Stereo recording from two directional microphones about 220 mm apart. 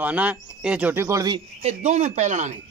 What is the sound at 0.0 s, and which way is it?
Speech, 5° right (ahead or behind).